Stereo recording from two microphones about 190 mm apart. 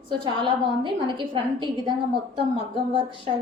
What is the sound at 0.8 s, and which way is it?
A woman's voice, 25° right (ahead or behind).